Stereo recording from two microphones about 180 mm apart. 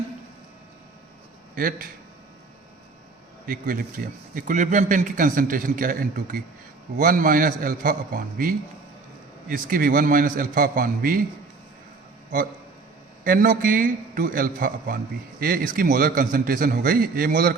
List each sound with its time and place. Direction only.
1.5 s a man's voice: 50° right (ahead or behind)
3.4 s a man's voice: 50° right (ahead or behind)
13.2 s a man's voice: 50° right (ahead or behind)